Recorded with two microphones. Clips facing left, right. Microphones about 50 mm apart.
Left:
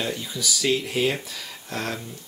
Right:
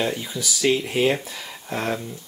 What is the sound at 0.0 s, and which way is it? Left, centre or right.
Speech, centre.